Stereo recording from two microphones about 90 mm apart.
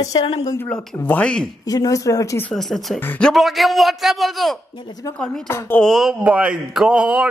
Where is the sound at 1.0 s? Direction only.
15° left (ahead or behind).